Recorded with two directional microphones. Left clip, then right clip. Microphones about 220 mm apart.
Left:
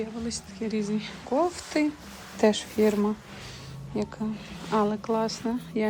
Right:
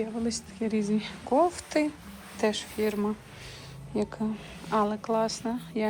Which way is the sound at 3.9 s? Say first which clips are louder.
Right 1 dB; 5° left (ahead or behind).